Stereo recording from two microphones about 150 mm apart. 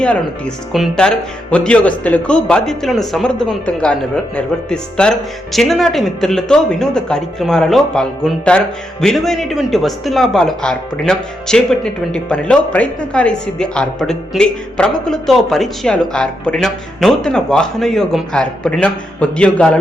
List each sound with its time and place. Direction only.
0.0 s speech: 5° left (ahead or behind)